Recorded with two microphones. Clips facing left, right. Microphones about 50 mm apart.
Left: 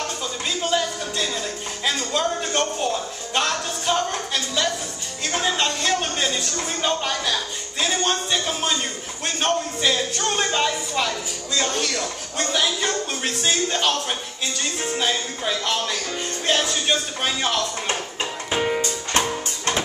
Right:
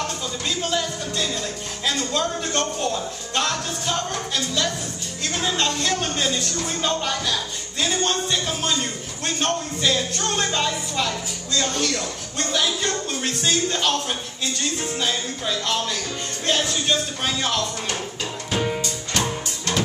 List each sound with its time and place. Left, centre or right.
0.5 s music: centre
5.7 s a sound: left
6.8 s speech: centre
7.8 s a sound: left
9.2 s speech: centre
18.5 s music: left